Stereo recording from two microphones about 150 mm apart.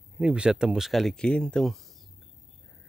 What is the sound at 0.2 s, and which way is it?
Speech, 5° right (ahead or behind).